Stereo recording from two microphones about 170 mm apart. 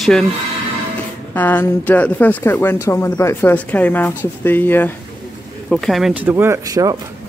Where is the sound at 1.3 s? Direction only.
10° left (ahead or behind).